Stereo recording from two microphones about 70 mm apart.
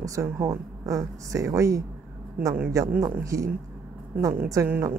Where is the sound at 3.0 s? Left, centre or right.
Right.